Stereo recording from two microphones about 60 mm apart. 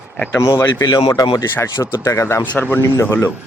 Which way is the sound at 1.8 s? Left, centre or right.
Left.